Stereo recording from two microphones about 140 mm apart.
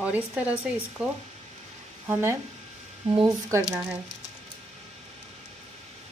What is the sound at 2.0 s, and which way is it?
Speech, 15° right (ahead or behind).